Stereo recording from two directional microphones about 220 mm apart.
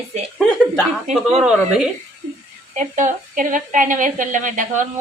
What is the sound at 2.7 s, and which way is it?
A woman's voice, 35° right (ahead or behind).